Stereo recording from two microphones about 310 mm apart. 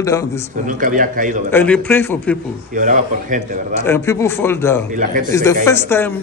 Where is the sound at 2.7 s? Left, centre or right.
Right.